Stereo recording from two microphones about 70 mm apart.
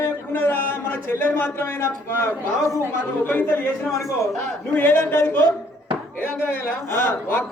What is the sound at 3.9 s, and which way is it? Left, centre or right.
Speech, left.